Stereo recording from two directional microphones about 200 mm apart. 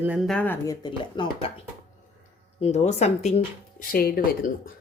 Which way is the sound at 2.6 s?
35° left (ahead or behind).